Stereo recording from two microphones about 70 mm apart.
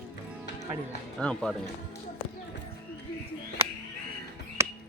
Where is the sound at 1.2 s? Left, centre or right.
Centre.